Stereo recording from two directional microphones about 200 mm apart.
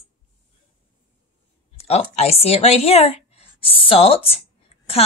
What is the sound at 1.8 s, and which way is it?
A woman's voice, 30° left (ahead or behind).